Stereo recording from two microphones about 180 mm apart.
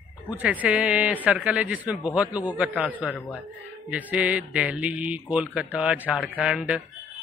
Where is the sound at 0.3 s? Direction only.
10° right (ahead or behind).